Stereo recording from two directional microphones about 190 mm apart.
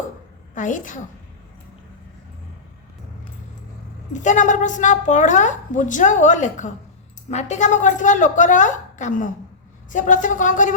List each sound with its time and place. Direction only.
0.5 s speech: 40° left (ahead or behind)
4.1 s a woman's voice: 40° left (ahead or behind)